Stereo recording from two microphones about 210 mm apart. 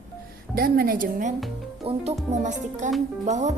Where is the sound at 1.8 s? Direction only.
25° right (ahead or behind).